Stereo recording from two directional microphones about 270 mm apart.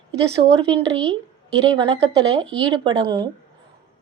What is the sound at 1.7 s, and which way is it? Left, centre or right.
A woman's voice, centre.